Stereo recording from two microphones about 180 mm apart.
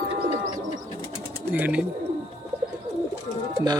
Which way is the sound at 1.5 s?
10° right (ahead or behind).